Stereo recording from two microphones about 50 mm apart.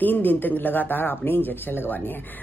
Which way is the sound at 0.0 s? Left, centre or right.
Left.